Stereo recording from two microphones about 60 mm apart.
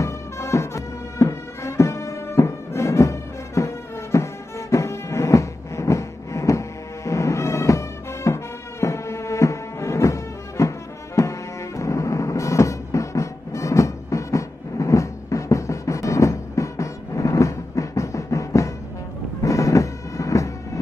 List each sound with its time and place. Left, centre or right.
0.0 s music: left